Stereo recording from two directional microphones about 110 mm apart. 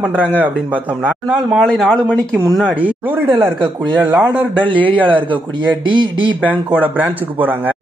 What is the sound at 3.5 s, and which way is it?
Speech, 40° right (ahead or behind).